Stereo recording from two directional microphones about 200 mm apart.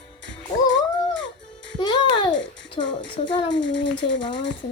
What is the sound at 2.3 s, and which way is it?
Babbling, 65° left (ahead or behind).